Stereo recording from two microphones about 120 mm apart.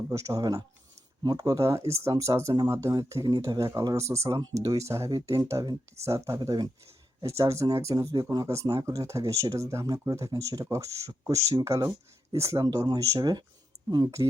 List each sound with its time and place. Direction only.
0.1 s speech: 25° right (ahead or behind)